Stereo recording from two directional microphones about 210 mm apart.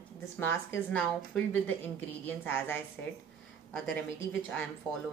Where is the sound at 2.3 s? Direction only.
10° left (ahead or behind).